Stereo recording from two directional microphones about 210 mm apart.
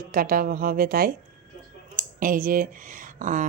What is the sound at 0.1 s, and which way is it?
Speech, 40° right (ahead or behind).